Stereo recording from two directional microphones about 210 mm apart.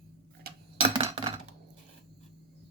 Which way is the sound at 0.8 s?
30° right (ahead or behind).